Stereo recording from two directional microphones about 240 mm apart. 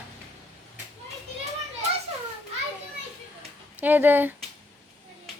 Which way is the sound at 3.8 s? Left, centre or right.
Centre.